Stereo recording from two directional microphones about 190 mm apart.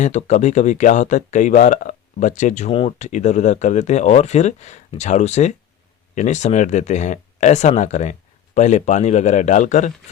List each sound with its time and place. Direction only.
0.0 s speech: 40° left (ahead or behind)